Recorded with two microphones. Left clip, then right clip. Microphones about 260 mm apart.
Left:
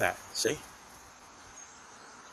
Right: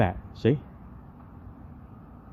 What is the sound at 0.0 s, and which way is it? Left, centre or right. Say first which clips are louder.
Speech: right 3 dB; centre.